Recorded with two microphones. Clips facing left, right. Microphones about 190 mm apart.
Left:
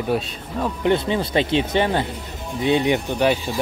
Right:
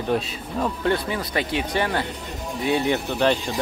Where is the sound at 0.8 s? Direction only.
25° left (ahead or behind).